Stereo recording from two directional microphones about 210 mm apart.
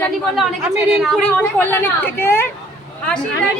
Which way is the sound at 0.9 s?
Centre (ahead or behind).